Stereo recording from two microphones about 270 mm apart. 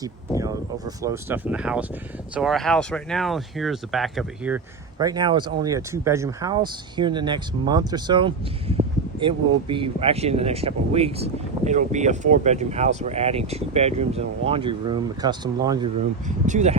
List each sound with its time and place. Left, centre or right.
0.3 s speech: centre
16.5 s speech: right